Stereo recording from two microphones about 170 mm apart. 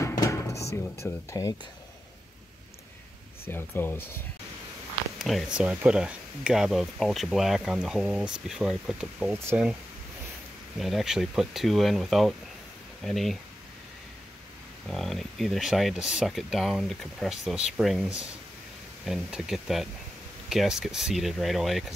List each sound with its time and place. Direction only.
0.0 s music: 20° left (ahead or behind)
1.0 s speech: 20° left (ahead or behind)
3.4 s speech: 15° left (ahead or behind)
5.2 s speech: 5° right (ahead or behind)
9.3 s speech: 15° right (ahead or behind)
10.8 s speech: centre (ahead or behind)
14.9 s speech: centre (ahead or behind)